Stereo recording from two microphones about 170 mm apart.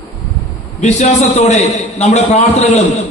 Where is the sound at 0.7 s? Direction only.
40° left (ahead or behind).